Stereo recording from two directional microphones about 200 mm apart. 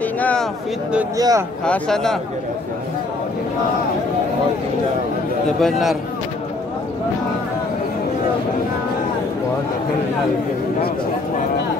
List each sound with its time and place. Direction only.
0.2 s a sound: 5° left (ahead or behind)
1.1 s speech: 15° right (ahead or behind)
1.7 s speech: centre (ahead or behind)
5.6 s speech: centre (ahead or behind)